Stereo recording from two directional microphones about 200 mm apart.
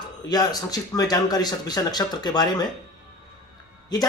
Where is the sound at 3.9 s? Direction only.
20° left (ahead or behind).